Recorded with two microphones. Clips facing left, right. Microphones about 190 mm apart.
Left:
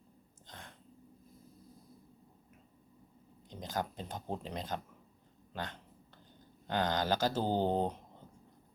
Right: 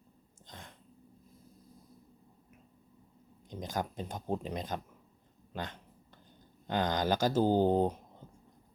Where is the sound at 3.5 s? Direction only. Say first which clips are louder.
Right 2 dB; 15° right (ahead or behind).